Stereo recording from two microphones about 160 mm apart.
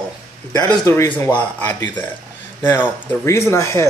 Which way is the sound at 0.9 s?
15° left (ahead or behind).